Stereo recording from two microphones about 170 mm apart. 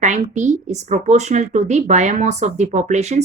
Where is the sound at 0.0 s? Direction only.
45° right (ahead or behind).